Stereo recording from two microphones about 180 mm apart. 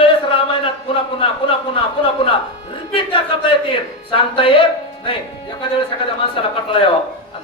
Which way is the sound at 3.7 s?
30° left (ahead or behind).